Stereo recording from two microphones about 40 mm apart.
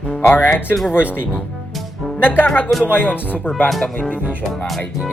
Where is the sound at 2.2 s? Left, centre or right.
Left.